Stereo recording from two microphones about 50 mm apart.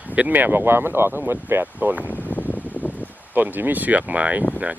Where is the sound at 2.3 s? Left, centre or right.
Left.